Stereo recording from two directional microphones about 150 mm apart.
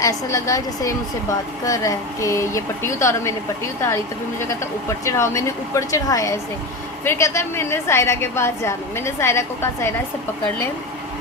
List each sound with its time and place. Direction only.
0.0 s a woman's voice: 20° left (ahead or behind)